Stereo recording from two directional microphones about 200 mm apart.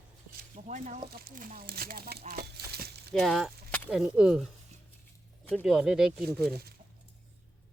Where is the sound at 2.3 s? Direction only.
50° right (ahead or behind).